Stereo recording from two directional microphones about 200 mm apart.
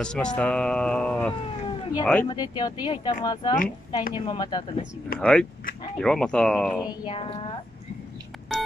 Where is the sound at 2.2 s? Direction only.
20° left (ahead or behind).